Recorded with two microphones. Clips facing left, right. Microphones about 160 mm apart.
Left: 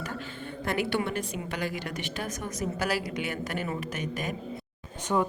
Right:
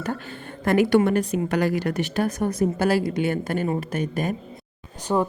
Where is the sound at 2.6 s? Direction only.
30° right (ahead or behind).